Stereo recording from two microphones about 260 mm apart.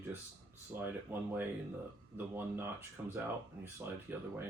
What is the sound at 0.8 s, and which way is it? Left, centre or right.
Speech, centre.